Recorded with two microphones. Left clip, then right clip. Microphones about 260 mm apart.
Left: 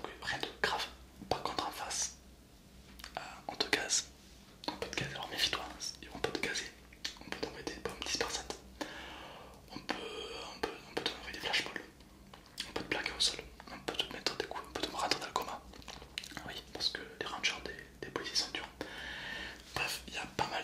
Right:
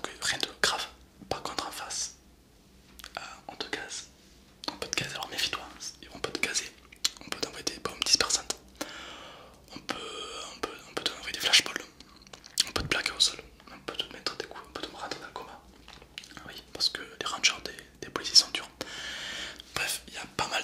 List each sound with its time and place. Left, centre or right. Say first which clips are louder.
0.0 s whispering: right 7 dB; centre
3.4 s whispering: left 5 dB; centre
4.6 s whispering: right 5 dB; centre
13.7 s whispering: right 2 dB; centre
16.7 s whispering: right 7 dB; centre